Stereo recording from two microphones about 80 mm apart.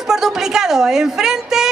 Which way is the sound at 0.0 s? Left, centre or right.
Centre.